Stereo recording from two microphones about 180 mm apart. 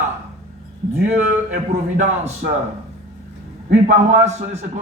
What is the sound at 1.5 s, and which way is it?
Speech, 40° right (ahead or behind).